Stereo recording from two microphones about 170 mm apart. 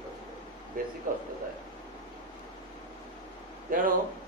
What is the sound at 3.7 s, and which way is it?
Speech, 55° right (ahead or behind).